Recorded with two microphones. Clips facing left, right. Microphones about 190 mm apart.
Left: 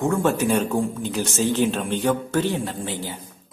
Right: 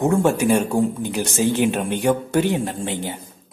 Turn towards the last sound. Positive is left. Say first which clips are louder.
# right 3 dB
turn(degrees=-20)  # may be behind; listen again after turning